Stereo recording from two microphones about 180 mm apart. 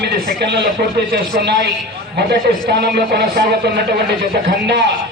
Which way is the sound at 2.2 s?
65° right (ahead or behind).